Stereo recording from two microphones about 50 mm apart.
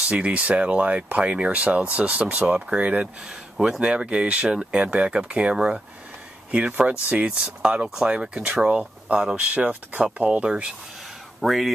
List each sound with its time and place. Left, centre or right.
0.0 s speech: right
3.5 s speech: centre
3.8 s speech: right
10.4 s speech: centre
11.4 s speech: centre